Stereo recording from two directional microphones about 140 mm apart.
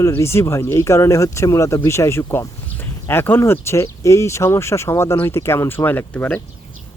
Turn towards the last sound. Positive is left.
turn(degrees=10)  # may be behind; listen again after turning